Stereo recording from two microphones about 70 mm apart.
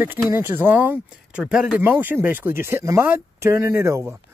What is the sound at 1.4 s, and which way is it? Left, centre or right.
Speech, centre.